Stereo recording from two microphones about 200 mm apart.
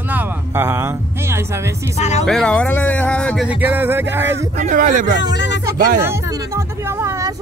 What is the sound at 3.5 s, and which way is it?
Speech, 10° right (ahead or behind).